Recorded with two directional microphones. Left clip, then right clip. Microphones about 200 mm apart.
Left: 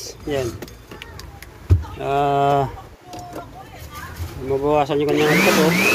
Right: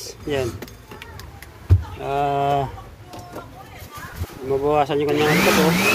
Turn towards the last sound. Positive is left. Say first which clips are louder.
# left 1 dB
turn(degrees=0)  # may be behind; listen again after turning